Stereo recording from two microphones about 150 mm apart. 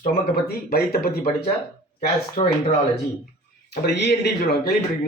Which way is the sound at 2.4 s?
60° left (ahead or behind).